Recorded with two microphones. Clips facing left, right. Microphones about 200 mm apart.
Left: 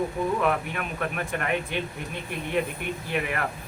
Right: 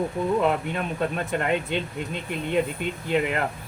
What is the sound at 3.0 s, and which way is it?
Speech, 20° right (ahead or behind).